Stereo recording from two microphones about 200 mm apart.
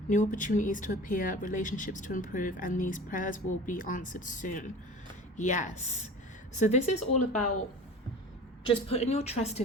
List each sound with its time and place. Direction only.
0.1 s speech: 40° left (ahead or behind)
8.6 s speech: 30° left (ahead or behind)